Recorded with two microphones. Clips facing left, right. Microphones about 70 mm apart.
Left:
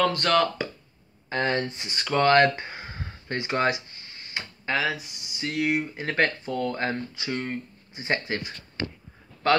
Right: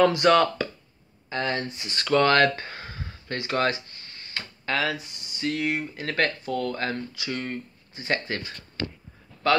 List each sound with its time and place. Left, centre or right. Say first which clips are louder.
0.0 s speech: right 4 dB; centre
1.3 s speech: left 2 dB; left
2.0 s speech: even; centre
4.3 s tick-tock: left 1 dB; centre
4.8 s speech: even; centre; by 8.4 s left